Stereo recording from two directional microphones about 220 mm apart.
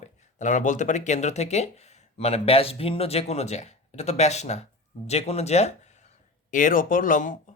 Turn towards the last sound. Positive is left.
turn(degrees=35)  # may be behind; listen again after turning